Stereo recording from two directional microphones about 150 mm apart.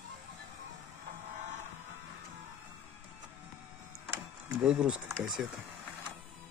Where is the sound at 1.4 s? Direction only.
50° right (ahead or behind).